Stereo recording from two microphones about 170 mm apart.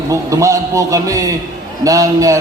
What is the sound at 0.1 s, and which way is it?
A man's voice, 20° right (ahead or behind).